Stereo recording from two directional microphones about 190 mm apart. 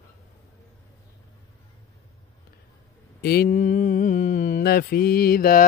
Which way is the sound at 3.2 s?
55° left (ahead or behind).